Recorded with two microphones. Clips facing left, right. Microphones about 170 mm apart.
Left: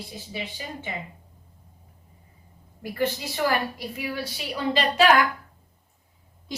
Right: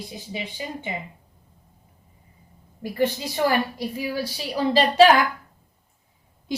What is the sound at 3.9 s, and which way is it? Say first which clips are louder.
Speech: right 6 dB; 35° right (ahead or behind).